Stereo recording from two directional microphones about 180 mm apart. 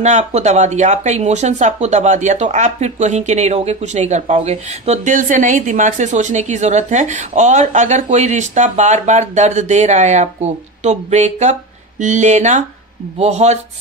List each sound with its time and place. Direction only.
0.0 s speech: 40° right (ahead or behind)